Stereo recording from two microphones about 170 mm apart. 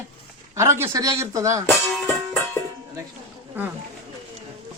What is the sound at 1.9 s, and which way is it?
Music, centre (ahead or behind).